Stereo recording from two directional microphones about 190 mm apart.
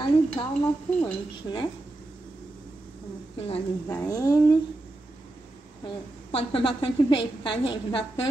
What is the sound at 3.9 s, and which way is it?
Speech, 20° left (ahead or behind).